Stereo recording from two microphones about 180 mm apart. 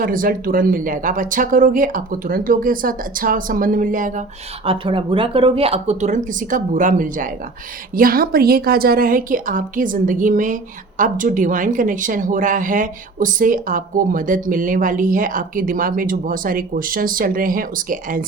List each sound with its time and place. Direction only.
0.0 s speech: 50° right (ahead or behind)
4.6 s speech: 30° right (ahead or behind); by 18.3 s 50° right (ahead or behind)